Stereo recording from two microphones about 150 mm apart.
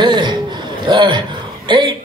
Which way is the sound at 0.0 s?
30° right (ahead or behind).